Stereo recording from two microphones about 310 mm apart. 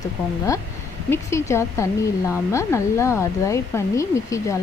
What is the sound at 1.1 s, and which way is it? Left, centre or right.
Speech, centre.